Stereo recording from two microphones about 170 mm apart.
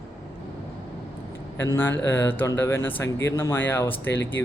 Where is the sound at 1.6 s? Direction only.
15° left (ahead or behind).